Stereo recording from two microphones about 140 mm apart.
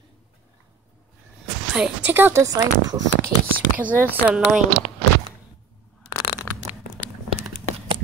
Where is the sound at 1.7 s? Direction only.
5° right (ahead or behind); by 3.0 s 25° right (ahead or behind).